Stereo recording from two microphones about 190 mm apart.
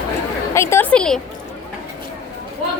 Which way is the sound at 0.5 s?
10° left (ahead or behind).